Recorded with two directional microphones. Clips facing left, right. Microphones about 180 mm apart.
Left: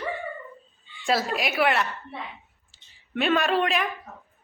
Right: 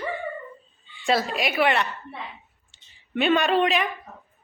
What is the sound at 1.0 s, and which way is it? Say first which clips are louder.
Speech: right 1 dB; centre (ahead or behind).